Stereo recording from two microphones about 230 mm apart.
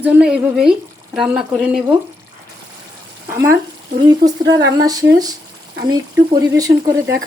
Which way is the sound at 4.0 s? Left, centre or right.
Centre.